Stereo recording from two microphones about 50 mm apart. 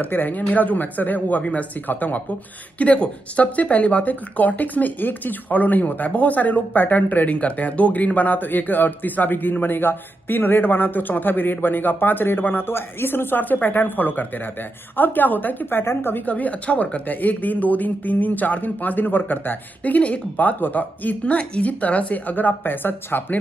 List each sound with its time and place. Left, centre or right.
0.0 s speech: left
1.9 s speech: left
2.8 s speech: left
15.8 s a woman's voice: left
16.3 s speech: left